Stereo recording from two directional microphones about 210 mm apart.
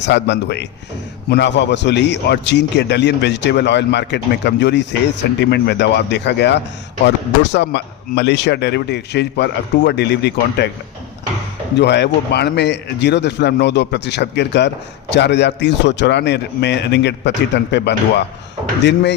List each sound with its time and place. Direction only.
0.0 s a man's voice: 55° left (ahead or behind)
11.8 s a man's voice: 55° left (ahead or behind)